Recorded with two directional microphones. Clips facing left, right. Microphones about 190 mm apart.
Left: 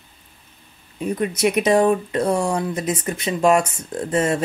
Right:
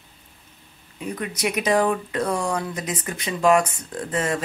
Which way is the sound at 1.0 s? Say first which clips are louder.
Left 7 dB; 25° left (ahead or behind).